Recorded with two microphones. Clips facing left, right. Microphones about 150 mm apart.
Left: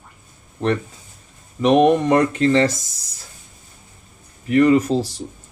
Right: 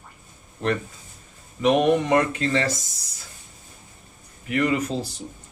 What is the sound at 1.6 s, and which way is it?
Speech, 40° left (ahead or behind).